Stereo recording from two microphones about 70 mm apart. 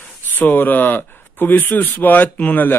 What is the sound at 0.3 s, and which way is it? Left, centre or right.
Speech, left.